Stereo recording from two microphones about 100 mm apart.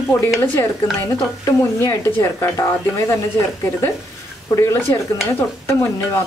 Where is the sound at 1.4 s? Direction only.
30° left (ahead or behind).